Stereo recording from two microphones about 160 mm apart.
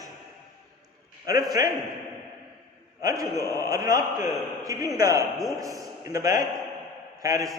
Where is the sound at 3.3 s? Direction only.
15° left (ahead or behind).